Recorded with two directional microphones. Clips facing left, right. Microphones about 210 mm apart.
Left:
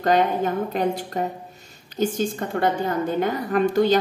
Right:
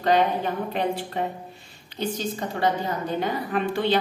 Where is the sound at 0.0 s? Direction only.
45° left (ahead or behind).